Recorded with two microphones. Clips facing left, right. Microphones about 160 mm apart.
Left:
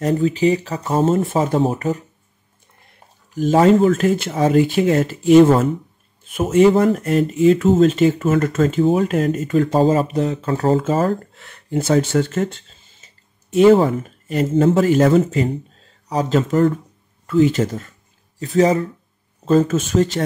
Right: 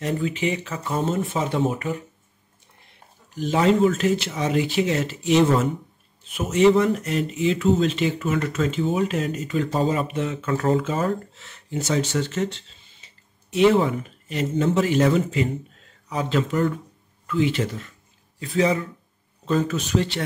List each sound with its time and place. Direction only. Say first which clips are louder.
0.0 s speech: left 8 dB; 35° left (ahead or behind)
3.3 s a man's voice: left 6 dB; 45° left (ahead or behind)